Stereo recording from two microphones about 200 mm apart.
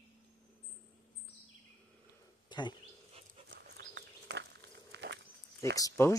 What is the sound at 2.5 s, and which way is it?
Speech, 20° left (ahead or behind).